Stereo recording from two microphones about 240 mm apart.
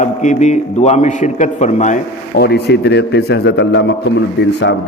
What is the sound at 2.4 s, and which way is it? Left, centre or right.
A man's voice, left.